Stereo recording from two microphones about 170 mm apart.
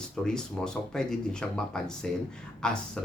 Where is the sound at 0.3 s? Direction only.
5° left (ahead or behind).